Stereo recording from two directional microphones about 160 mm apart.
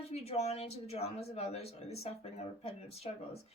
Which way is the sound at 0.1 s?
40° left (ahead or behind).